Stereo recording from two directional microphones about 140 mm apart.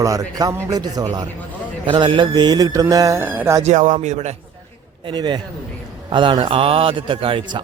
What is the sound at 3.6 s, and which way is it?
Speech, 60° right (ahead or behind).